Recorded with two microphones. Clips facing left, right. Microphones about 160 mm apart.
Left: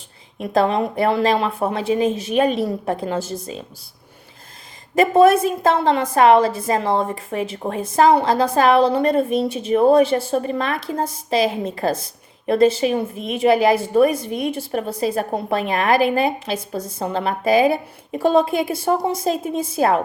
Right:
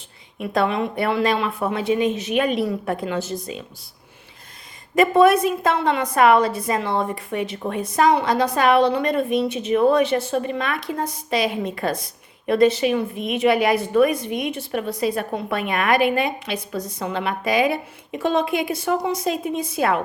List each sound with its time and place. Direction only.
0.3 s a woman's voice: 35° left (ahead or behind)
4.9 s a woman's voice: 30° left (ahead or behind)